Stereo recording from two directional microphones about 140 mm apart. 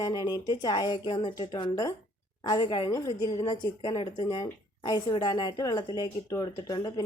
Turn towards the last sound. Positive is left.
turn(degrees=30)  # may be behind; listen again after turning